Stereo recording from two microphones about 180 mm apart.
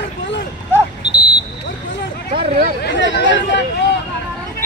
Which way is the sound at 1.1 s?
25° left (ahead or behind).